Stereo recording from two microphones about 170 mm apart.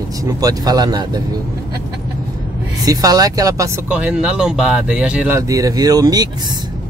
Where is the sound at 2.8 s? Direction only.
20° right (ahead or behind).